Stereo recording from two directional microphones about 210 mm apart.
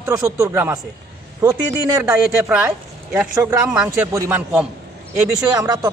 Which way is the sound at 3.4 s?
5° right (ahead or behind).